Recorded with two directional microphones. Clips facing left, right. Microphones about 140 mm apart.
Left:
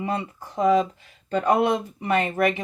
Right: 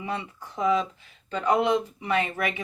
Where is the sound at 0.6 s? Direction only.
45° left (ahead or behind).